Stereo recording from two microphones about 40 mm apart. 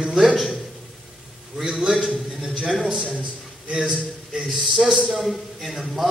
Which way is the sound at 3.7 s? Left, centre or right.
Right.